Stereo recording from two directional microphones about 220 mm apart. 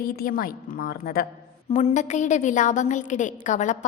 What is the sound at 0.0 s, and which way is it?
A woman's voice, 40° left (ahead or behind).